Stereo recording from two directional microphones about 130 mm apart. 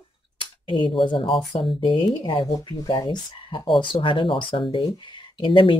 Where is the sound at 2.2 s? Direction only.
30° left (ahead or behind).